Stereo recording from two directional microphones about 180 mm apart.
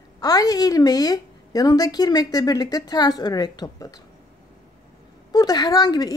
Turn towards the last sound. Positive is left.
turn(degrees=20)  # may be behind; listen again after turning